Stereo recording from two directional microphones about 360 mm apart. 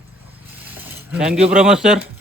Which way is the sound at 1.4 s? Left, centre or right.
Centre.